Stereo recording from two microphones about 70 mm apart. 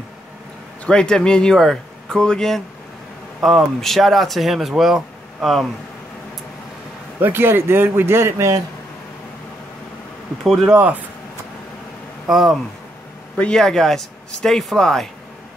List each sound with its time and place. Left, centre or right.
0.8 s speech: centre
7.2 s a man's voice: right
10.4 s speech: centre
12.3 s speech: centre
13.4 s speech: centre